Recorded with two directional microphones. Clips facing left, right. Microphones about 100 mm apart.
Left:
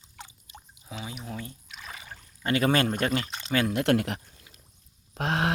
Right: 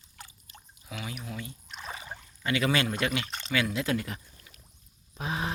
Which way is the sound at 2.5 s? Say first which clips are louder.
Left 3 dB; 45° left (ahead or behind).